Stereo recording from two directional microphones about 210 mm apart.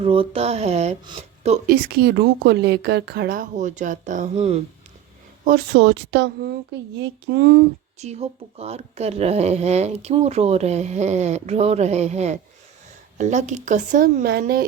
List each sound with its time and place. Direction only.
0.0 s speech: 25° right (ahead or behind)
5.5 s a woman's voice: 55° right (ahead or behind)
7.9 s speech: 30° right (ahead or behind)